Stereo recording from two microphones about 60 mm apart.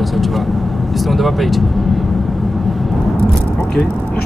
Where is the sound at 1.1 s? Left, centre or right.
Centre.